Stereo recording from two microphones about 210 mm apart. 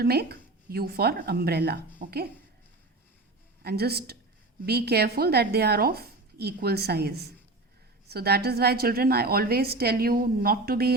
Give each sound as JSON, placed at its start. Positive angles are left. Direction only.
{"t": 0.0, "sound": "a woman's voice", "side_deg": -50}
{"t": 3.6, "sound": "a woman's voice", "side_deg": -50}